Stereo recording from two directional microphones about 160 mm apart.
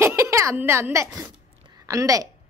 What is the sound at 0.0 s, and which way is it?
A child's voice, 15° right (ahead or behind).